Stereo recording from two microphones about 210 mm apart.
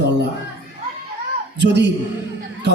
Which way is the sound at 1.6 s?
55° right (ahead or behind).